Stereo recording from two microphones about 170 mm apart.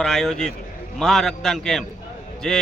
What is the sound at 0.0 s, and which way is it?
Speech, centre (ahead or behind).